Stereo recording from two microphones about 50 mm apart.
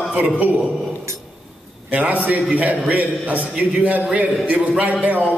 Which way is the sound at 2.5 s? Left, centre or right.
Right.